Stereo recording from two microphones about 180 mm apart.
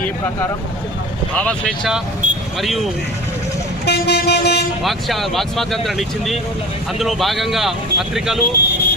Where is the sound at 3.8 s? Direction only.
65° left (ahead or behind).